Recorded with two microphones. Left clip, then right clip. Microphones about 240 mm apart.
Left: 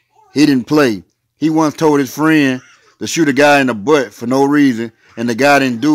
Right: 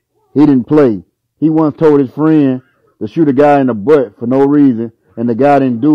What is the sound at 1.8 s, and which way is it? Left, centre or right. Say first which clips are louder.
A man's voice: right 3 dB; centre.